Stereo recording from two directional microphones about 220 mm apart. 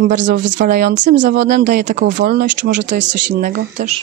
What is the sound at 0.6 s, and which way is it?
Speech, 35° right (ahead or behind).